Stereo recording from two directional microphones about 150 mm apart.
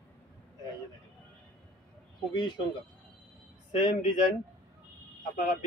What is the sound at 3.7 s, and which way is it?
Speech, 55° left (ahead or behind).